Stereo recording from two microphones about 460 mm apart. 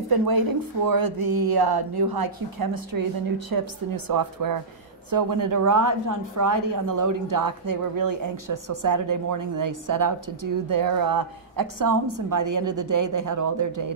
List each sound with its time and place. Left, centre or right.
0.1 s a woman's voice: right